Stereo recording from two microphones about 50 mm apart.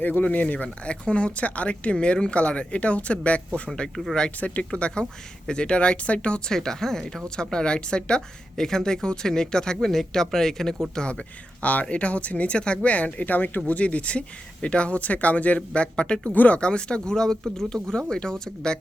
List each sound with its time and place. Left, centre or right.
0.0 s speech: left
6.5 s speech: centre
10.9 s speech: centre
11.6 s speech: left
16.3 s speech: left
16.6 s speech: centre